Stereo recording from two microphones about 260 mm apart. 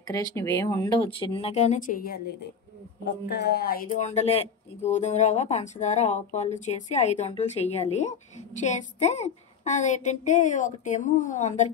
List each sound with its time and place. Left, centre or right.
0.0 s speech: centre